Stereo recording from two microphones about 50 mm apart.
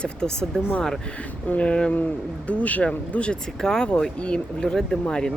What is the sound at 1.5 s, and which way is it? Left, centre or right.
Speech, left.